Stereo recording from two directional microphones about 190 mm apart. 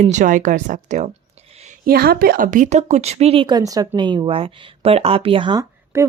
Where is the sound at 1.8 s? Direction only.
50° right (ahead or behind).